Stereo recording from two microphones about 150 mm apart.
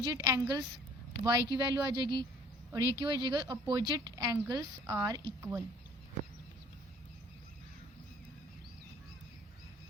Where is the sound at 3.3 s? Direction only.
25° right (ahead or behind).